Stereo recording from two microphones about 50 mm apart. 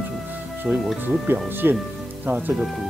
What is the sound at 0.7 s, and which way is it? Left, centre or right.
Speech, right.